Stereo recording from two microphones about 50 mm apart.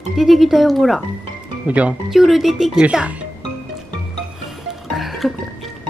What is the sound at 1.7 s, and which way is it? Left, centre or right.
Speech, right.